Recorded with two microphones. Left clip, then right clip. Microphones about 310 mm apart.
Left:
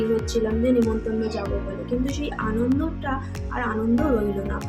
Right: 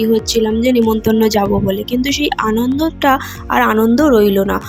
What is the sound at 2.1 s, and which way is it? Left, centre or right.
Speech, right.